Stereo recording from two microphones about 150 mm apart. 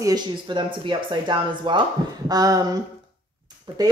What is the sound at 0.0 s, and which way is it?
Speech, 30° right (ahead or behind).